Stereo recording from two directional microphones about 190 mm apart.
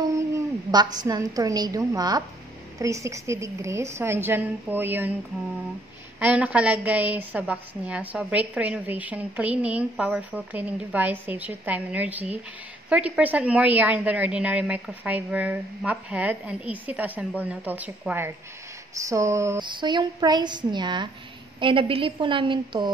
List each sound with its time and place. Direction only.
0.7 s a woman's voice: 20° right (ahead or behind)
6.1 s a woman's voice: 5° right (ahead or behind); by 22.8 s 25° right (ahead or behind)